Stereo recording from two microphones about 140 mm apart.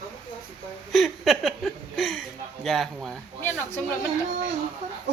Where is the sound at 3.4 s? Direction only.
15° left (ahead or behind).